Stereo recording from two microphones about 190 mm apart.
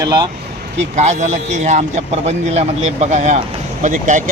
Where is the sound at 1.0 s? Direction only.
40° right (ahead or behind).